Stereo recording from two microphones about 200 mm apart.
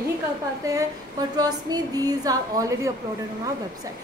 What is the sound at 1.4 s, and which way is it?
A woman's voice, 20° right (ahead or behind).